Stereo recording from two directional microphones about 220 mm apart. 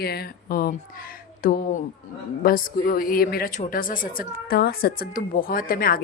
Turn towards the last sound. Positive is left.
turn(degrees=40)  # may be behind; listen again after turning